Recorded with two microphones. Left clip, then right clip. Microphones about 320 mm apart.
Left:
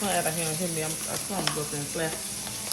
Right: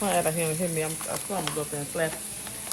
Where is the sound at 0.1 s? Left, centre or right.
Centre.